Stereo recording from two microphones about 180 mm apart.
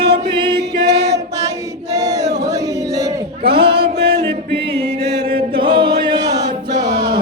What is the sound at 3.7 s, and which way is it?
Music, 60° right (ahead or behind).